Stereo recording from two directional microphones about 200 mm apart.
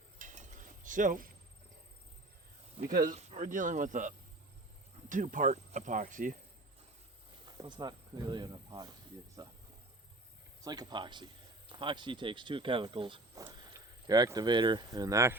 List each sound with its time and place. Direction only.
0.2 s a sound: 40° right (ahead or behind)
0.9 s speech: 40° right (ahead or behind)
2.8 s speech: 45° right (ahead or behind)
7.6 s speech: 20° right (ahead or behind)
10.6 s speech: 20° right (ahead or behind)